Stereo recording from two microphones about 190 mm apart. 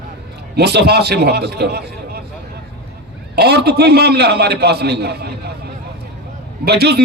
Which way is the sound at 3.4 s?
60° right (ahead or behind).